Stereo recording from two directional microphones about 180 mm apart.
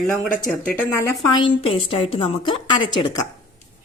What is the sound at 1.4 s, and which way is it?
A woman's voice, 30° left (ahead or behind).